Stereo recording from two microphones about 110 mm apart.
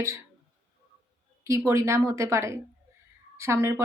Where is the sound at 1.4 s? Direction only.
25° right (ahead or behind).